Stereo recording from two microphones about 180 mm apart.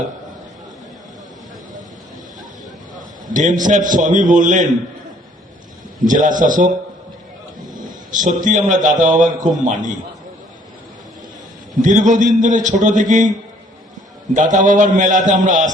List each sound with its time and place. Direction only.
3.2 s a man's voice: 45° right (ahead or behind)
6.1 s a man's voice: 45° right (ahead or behind)
7.7 s a man's voice: 45° right (ahead or behind)
11.8 s a man's voice: 45° right (ahead or behind)
14.3 s a man's voice: 45° right (ahead or behind)